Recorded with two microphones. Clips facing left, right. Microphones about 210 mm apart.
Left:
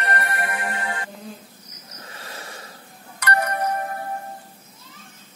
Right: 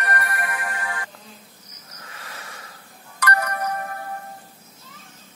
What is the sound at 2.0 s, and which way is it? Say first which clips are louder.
Cricket: left 3 dB; 30° left (ahead or behind).